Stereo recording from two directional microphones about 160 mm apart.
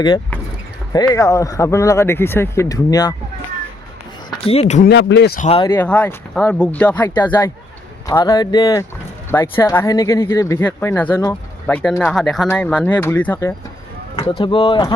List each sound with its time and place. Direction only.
1.1 s speech: 20° left (ahead or behind)
4.4 s speech: 40° left (ahead or behind)
4.8 s speech: 90° left
5.4 s speech: 40° left (ahead or behind)
5.6 s speech: 15° left (ahead or behind)
8.0 s speech: 20° left (ahead or behind)
14.2 s speech: 30° left (ahead or behind)